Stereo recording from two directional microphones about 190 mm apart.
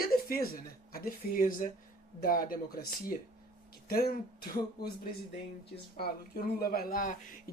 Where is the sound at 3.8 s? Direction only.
55° left (ahead or behind).